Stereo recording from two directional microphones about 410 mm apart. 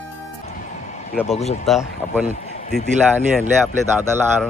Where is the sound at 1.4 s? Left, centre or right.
Centre.